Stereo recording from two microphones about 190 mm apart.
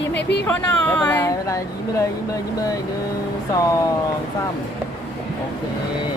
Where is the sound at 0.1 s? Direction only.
65° left (ahead or behind).